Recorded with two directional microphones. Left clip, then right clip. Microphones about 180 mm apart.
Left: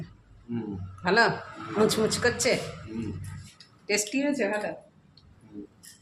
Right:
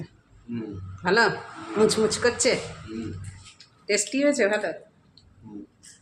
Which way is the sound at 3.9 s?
10° right (ahead or behind).